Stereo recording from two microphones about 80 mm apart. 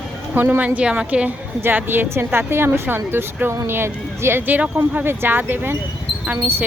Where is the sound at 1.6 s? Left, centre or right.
Right.